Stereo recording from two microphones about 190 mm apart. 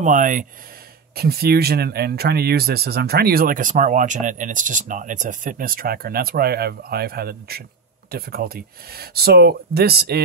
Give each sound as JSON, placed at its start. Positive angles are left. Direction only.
{"t": 0.0, "sound": "speech", "side_deg": -40}
{"t": 1.1, "sound": "speech", "side_deg": -55}